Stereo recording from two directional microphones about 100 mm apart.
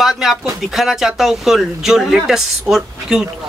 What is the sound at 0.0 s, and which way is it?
Speech, centre (ahead or behind).